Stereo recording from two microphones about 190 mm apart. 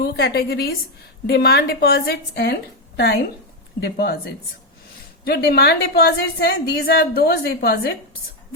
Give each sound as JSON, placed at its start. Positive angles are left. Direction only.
{"t": 0.0, "sound": "a woman's voice", "side_deg": 55}
{"t": 5.2, "sound": "a woman's voice", "side_deg": 55}